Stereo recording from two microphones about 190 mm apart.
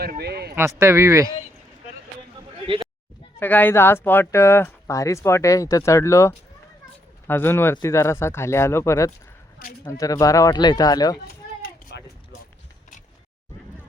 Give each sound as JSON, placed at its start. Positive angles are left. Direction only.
{"t": 0.0, "sound": "speech", "side_deg": -55}
{"t": 0.5, "sound": "speech", "side_deg": -15}
{"t": 3.4, "sound": "speech", "side_deg": 10}
{"t": 11.9, "sound": "a sound", "side_deg": 65}